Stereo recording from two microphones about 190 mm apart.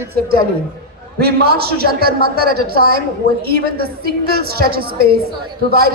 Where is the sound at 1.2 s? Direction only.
55° right (ahead or behind).